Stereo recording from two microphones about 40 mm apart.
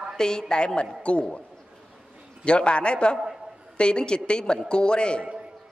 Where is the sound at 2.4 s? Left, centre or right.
Left.